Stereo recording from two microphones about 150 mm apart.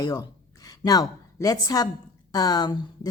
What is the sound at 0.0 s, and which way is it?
A woman's voice, 25° left (ahead or behind).